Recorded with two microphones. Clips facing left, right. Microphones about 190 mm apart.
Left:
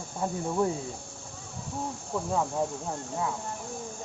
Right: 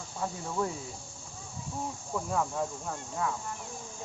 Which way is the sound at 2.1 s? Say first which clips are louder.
Left 2 dB; 20° left (ahead or behind).